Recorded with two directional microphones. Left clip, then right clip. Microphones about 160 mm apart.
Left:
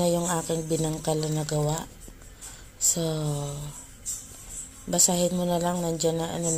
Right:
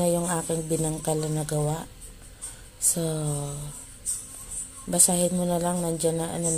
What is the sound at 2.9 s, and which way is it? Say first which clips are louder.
Speech: left 1 dB; centre (ahead or behind).